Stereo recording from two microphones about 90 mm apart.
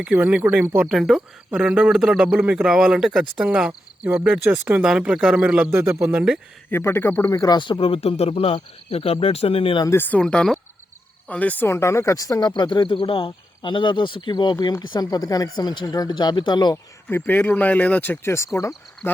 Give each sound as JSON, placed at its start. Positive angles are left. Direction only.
{"t": 0.0, "sound": "speech", "side_deg": -15}
{"t": 0.9, "sound": "speech", "side_deg": -5}
{"t": 4.4, "sound": "speech", "side_deg": -25}
{"t": 4.8, "sound": "speech", "side_deg": -10}
{"t": 5.7, "sound": "speech", "side_deg": -30}
{"t": 6.7, "sound": "speech", "side_deg": 25}
{"t": 7.5, "sound": "speech", "side_deg": 65}
{"t": 10.0, "sound": "speech", "side_deg": 15}
{"t": 14.6, "sound": "speech", "side_deg": 50}
{"t": 16.7, "sound": "speech", "side_deg": 25}